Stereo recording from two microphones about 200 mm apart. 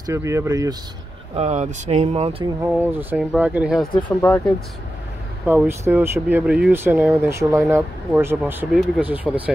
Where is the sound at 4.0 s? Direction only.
5° left (ahead or behind).